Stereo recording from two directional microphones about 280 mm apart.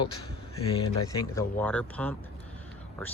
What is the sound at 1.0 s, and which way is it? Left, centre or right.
Speech, centre.